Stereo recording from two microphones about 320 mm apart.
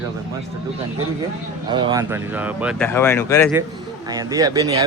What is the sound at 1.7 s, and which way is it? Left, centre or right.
Speech, centre.